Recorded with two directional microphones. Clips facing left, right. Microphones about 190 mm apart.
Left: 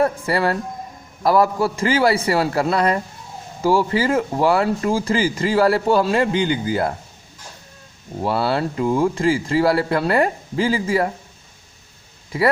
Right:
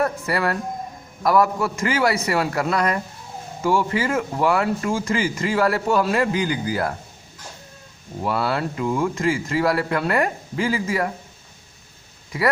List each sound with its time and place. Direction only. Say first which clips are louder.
0.0 s speech: left 3 dB; 30° left (ahead or behind)
8.2 s speech: left 3 dB; 30° left (ahead or behind)
12.3 s speech: left 3 dB; 25° left (ahead or behind)